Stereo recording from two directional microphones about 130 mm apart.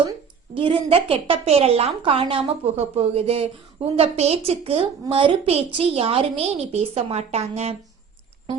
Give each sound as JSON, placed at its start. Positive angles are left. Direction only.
{"t": 0.5, "sound": "a woman's voice", "side_deg": -45}